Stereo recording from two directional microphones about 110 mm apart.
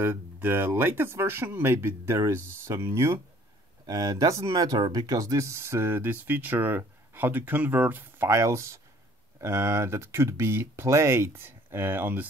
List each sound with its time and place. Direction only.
0.0 s speech: 20° right (ahead or behind)
3.8 s speech: 35° right (ahead or behind); by 12.3 s 15° right (ahead or behind)